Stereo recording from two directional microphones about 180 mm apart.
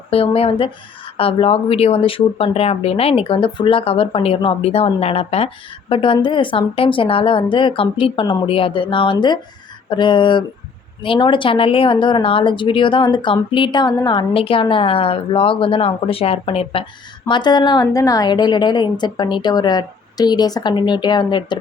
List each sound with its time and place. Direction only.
0.1 s speech: 30° left (ahead or behind)